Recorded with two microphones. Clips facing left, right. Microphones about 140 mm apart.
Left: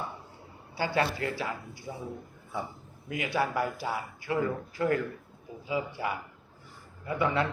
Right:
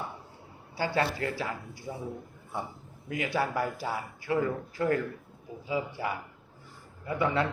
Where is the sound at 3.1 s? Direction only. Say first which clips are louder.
Even; 35° right (ahead or behind).